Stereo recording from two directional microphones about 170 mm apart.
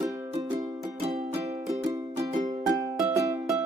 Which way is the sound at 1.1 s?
45° right (ahead or behind).